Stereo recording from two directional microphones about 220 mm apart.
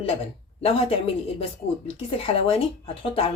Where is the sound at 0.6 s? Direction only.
25° left (ahead or behind).